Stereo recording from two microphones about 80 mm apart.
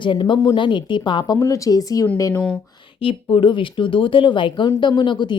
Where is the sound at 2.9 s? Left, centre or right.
Left.